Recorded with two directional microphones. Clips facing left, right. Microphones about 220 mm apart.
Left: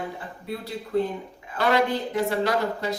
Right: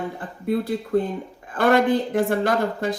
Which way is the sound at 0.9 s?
50° right (ahead or behind).